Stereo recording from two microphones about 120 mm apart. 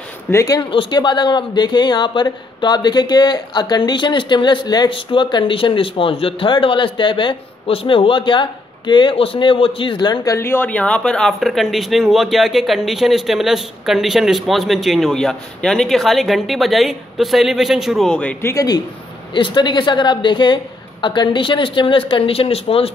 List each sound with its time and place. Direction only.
0.3 s speech: 25° left (ahead or behind)
0.6 s speech: 45° left (ahead or behind)
10.3 s speech: 20° left (ahead or behind)
18.5 s speech: 30° left (ahead or behind)
19.3 s speech: 40° left (ahead or behind)